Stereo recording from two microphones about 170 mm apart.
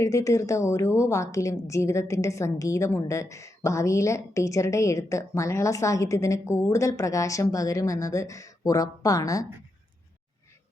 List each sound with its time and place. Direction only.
0.0 s a woman's voice: 20° left (ahead or behind)